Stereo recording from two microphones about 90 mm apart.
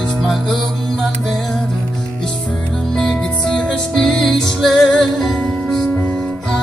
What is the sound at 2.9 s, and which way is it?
Music, 5° left (ahead or behind).